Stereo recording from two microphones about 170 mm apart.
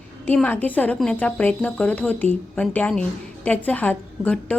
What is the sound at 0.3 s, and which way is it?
A woman's voice, 10° left (ahead or behind).